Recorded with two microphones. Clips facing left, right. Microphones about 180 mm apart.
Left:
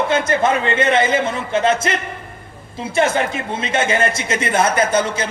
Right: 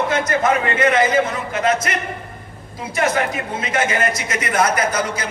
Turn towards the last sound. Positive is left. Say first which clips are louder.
# left 4 dB
turn(degrees=25)  # may be behind; listen again after turning